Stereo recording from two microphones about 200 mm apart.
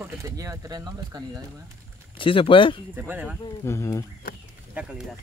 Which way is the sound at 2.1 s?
25° left (ahead or behind).